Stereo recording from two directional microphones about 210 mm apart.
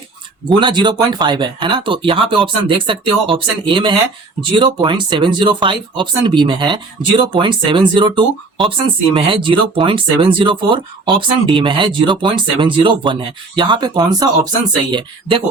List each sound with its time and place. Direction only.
0.4 s speech: 20° right (ahead or behind)